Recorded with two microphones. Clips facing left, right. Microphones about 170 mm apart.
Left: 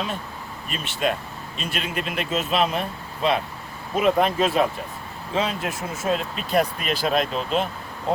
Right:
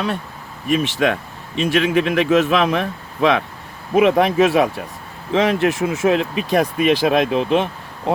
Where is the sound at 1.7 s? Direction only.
75° right (ahead or behind).